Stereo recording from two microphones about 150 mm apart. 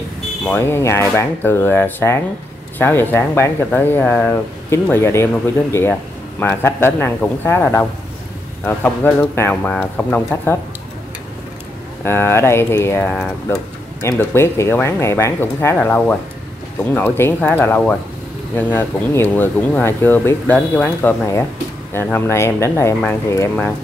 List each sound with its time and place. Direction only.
0.5 s speech: 15° left (ahead or behind)
12.0 s speech: 15° left (ahead or behind)